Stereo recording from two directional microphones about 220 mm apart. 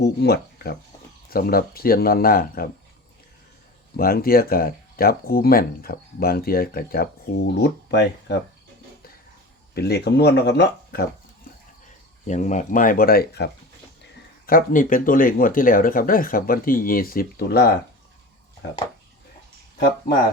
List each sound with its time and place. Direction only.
0.0 s speech: 45° left (ahead or behind)
3.9 s speech: 40° left (ahead or behind)
9.7 s speech: 45° left (ahead or behind)
12.3 s speech: 35° left (ahead or behind)